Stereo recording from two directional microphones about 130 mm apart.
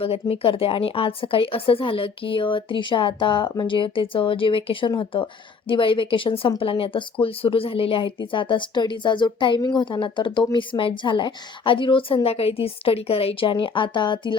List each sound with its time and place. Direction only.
0.0 s a woman's voice: 45° left (ahead or behind)